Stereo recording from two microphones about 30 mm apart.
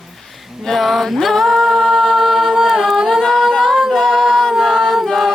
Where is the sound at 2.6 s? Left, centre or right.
Centre.